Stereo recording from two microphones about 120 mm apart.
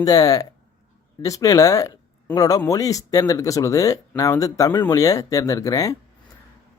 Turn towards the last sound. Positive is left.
turn(degrees=30)  # may be behind; listen again after turning